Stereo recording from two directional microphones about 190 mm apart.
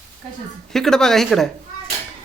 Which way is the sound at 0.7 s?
Centre (ahead or behind).